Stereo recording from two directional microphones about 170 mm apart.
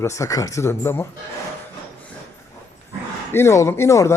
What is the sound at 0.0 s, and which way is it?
Speech, 15° left (ahead or behind).